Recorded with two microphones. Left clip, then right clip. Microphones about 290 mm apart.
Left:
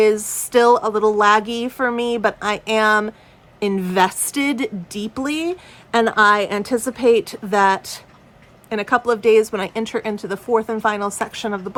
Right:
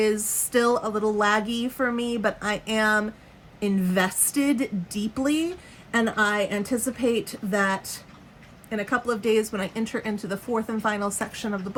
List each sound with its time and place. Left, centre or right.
0.0 s a woman's voice: centre
8.7 s a woman's voice: centre